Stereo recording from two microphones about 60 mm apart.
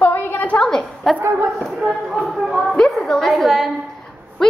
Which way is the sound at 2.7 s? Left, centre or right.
Centre.